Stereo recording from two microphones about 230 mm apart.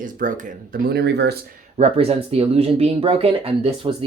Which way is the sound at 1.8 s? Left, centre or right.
Right.